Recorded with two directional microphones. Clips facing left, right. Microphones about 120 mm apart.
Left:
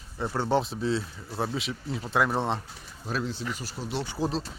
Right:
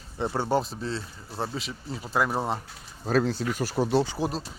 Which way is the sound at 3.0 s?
45° right (ahead or behind).